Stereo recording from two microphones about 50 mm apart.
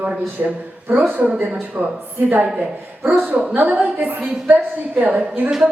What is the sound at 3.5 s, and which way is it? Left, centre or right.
A woman's voice, right.